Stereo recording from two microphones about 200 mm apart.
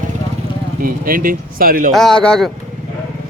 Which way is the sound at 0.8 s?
45° right (ahead or behind).